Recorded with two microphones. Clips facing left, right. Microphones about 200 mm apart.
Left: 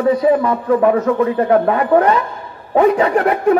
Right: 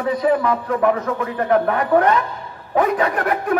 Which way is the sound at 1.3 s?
30° left (ahead or behind).